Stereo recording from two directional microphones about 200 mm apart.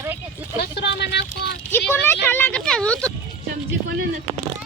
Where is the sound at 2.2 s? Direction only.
5° left (ahead or behind).